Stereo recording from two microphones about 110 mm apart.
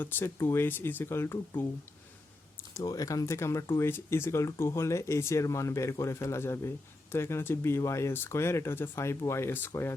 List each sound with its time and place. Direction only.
0.0 s speech: 20° left (ahead or behind)